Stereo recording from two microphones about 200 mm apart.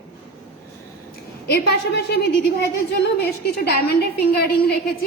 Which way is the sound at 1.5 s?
50° left (ahead or behind).